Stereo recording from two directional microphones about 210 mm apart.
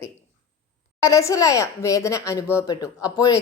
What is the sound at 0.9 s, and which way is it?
A woman's voice, 15° left (ahead or behind).